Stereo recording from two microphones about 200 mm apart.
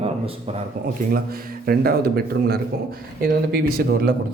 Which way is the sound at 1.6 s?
45° right (ahead or behind).